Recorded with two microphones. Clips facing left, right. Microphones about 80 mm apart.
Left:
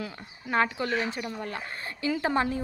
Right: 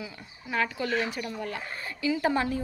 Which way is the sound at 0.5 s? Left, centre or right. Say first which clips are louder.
Left 2 dB; left.